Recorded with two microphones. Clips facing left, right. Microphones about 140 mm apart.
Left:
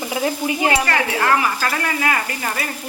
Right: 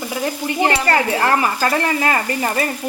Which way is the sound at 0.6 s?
35° right (ahead or behind).